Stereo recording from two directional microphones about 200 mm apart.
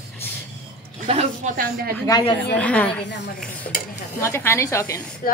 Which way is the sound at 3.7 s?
45° left (ahead or behind).